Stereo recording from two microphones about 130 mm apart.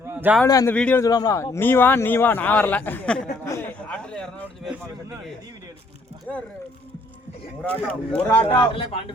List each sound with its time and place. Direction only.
0.1 s a sound: 15° right (ahead or behind)
0.4 s speech: 25° left (ahead or behind)
0.7 s a man's voice: 10° left (ahead or behind)
1.0 s a man's voice: 30° left (ahead or behind); by 3.2 s 10° left (ahead or behind)
3.4 s speech: 20° left (ahead or behind)
3.8 s a man's voice: 10° left (ahead or behind)
6.3 s a man's voice: 10° left (ahead or behind)
7.6 s a man's voice: 10° left (ahead or behind)
8.4 s speech: 40° left (ahead or behind)